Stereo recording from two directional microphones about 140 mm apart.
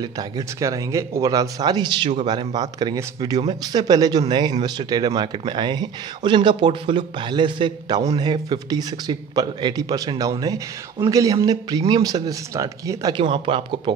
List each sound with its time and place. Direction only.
0.0 s speech: 25° right (ahead or behind)
13.1 s speech: 35° right (ahead or behind)